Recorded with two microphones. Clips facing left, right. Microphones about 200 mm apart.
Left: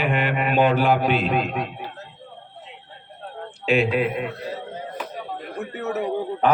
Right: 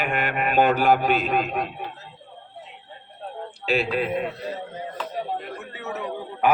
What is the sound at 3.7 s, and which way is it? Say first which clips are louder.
Speech: left 4 dB; 35° right (ahead or behind).